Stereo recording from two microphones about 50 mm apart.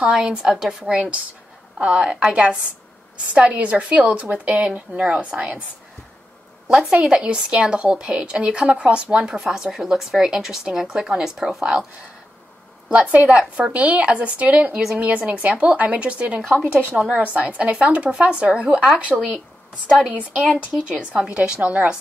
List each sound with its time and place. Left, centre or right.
0.3 s speech: centre
1.8 s a woman's voice: right
6.9 s a woman's voice: right
12.9 s a woman's voice: right
16.4 s speech: centre
17.2 s a woman's voice: right